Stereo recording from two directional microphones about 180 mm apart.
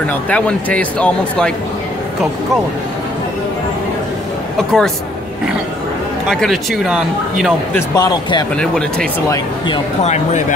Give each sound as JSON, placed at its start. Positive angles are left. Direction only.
{"t": 0.0, "sound": "speech", "side_deg": 10}
{"t": 4.6, "sound": "speech", "side_deg": 0}
{"t": 6.2, "sound": "speech", "side_deg": 0}
{"t": 7.9, "sound": "speech", "side_deg": 20}
{"t": 8.5, "sound": "speech", "side_deg": 5}
{"t": 10.0, "sound": "speech", "side_deg": 40}